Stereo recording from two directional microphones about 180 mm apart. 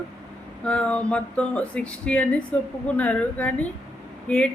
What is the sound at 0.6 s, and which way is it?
A woman's voice, 5° left (ahead or behind).